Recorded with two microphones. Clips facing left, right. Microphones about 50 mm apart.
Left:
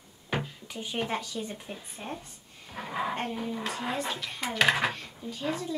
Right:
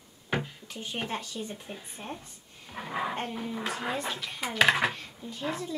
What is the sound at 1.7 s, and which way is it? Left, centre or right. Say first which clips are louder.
Speech: left 1 dB; centre.